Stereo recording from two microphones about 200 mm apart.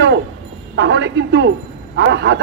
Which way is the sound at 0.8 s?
65° right (ahead or behind).